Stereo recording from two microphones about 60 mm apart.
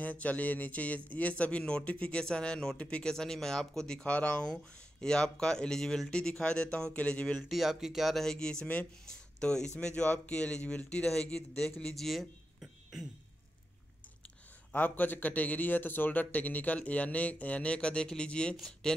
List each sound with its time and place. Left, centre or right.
0.0 s a man's voice: left
7.4 s a man's voice: centre; by 11.1 s left
11.1 s speech: centre
11.8 s a sound: centre
14.7 s a man's voice: left; by 19.0 s centre